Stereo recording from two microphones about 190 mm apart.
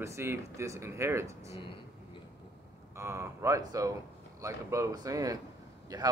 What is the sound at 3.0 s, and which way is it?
A man's voice, 15° right (ahead or behind).